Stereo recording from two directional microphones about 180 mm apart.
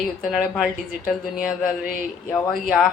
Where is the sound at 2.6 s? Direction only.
5° right (ahead or behind).